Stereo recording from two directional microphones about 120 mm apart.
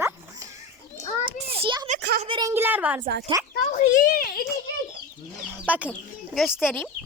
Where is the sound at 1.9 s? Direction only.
80° right.